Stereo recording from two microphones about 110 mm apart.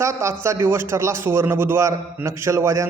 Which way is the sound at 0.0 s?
25° right (ahead or behind).